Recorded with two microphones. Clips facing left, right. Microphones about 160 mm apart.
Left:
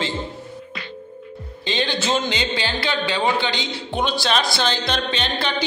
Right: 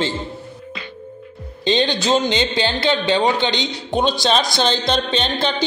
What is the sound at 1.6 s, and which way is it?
A man's voice, 20° right (ahead or behind).